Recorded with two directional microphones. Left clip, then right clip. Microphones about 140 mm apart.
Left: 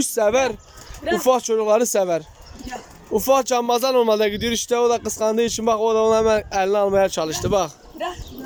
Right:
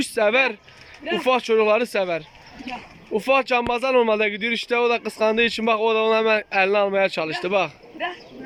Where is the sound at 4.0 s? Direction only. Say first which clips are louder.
Left 1 dB; 15° left (ahead or behind).